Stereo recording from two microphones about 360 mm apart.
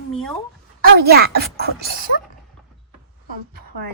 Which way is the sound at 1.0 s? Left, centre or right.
Right.